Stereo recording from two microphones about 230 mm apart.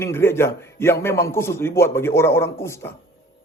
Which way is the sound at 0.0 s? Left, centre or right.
Centre.